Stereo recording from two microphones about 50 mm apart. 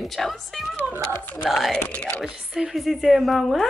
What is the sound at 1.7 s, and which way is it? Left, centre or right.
Speech, centre.